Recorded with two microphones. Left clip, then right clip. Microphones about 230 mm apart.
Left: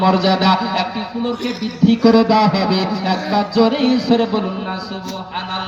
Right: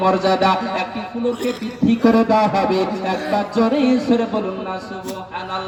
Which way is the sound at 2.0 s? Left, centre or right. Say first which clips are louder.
Left 2 dB; left.